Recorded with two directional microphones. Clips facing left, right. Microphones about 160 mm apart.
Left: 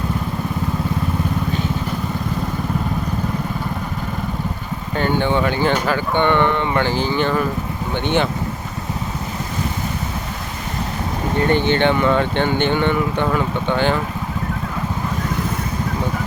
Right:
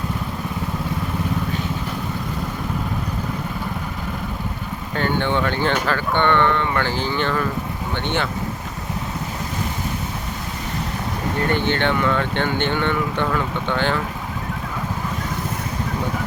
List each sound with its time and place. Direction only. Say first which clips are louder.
4.9 s speech: left 3 dB; 10° left (ahead or behind)
11.5 s speech: left 4 dB; 20° left (ahead or behind)